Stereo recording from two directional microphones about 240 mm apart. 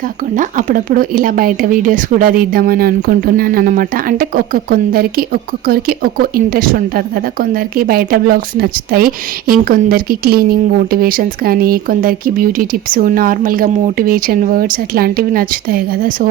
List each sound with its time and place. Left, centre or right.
0.3 s speech: right